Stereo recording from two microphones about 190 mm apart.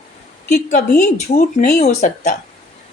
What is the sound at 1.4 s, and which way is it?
Speech, 40° left (ahead or behind).